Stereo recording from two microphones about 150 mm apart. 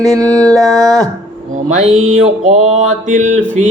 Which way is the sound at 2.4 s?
50° right (ahead or behind).